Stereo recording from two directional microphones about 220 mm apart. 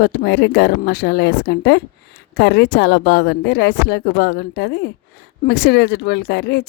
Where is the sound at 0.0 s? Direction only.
45° left (ahead or behind).